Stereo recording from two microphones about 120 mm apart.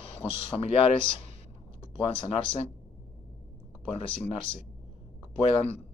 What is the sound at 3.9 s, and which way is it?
Speech, 50° left (ahead or behind).